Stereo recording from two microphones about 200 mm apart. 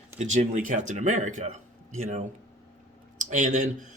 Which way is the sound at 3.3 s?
40° right (ahead or behind).